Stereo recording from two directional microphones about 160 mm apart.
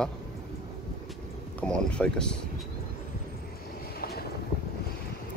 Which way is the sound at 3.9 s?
75° left (ahead or behind).